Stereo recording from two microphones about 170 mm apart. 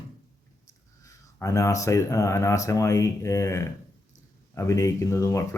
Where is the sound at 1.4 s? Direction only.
20° left (ahead or behind).